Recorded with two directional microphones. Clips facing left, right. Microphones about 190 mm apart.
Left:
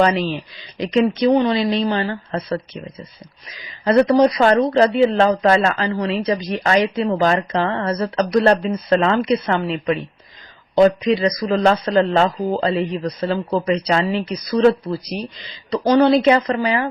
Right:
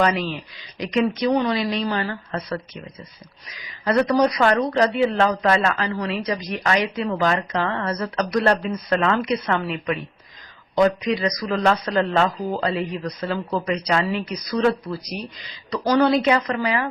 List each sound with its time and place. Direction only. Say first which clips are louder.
0.0 s speech: left 4 dB; 30° left (ahead or behind)
3.8 s speech: left 5 dB; 25° left (ahead or behind)